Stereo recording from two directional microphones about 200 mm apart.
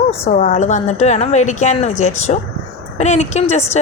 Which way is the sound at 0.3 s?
40° left (ahead or behind).